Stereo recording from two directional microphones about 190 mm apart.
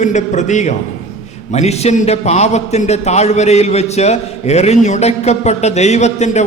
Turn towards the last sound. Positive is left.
turn(degrees=35)  # may be behind; listen again after turning